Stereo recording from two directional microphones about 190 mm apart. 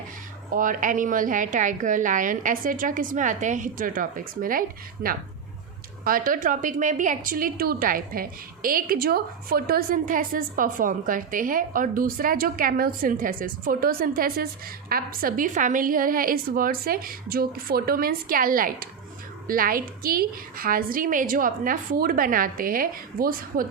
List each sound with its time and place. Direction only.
0.5 s a woman's voice: 45° right (ahead or behind)